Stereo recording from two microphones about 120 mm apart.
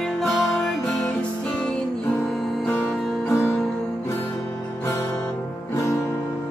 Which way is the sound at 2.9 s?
Centre (ahead or behind).